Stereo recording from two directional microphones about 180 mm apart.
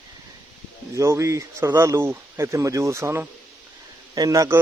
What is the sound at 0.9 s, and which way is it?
A man's voice, 15° right (ahead or behind).